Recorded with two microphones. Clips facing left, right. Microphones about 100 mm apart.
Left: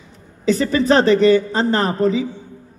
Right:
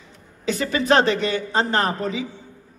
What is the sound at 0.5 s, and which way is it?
A woman's voice, 40° left (ahead or behind).